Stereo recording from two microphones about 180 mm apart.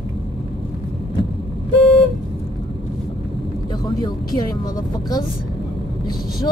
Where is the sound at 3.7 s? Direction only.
25° left (ahead or behind).